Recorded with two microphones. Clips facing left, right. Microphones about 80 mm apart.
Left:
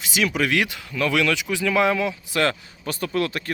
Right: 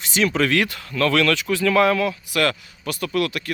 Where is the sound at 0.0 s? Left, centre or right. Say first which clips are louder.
Right 3 dB; centre.